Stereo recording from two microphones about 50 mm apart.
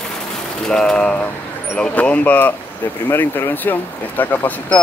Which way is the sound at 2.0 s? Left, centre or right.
Left.